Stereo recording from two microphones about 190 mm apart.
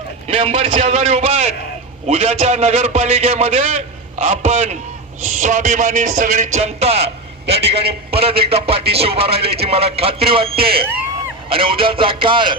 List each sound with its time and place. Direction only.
0.3 s a man's voice: 30° right (ahead or behind)
7.6 s a man's voice: 60° right (ahead or behind)
8.1 s a man's voice: 30° right (ahead or behind)